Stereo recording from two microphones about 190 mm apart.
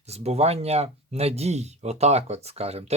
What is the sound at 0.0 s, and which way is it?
Speech, 35° right (ahead or behind).